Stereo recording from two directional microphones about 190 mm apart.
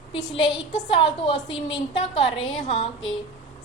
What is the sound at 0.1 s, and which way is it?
A woman's voice, 25° left (ahead or behind).